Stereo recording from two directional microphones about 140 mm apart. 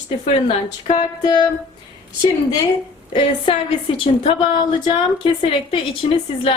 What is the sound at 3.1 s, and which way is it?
A woman's voice, 40° left (ahead or behind).